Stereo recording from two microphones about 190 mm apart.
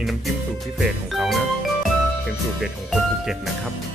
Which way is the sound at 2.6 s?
Centre (ahead or behind).